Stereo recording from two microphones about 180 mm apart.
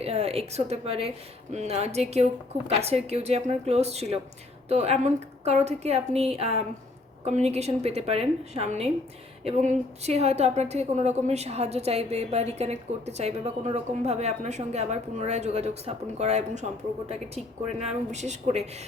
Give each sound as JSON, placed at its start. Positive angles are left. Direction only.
{"t": 0.0, "sound": "a woman's voice", "side_deg": -35}